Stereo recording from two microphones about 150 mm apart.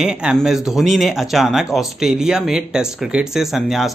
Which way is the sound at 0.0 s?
5° right (ahead or behind).